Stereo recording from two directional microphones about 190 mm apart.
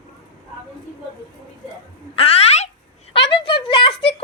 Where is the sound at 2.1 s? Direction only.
30° left (ahead or behind).